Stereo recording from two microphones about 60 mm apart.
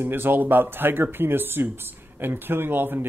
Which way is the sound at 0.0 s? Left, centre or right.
Right.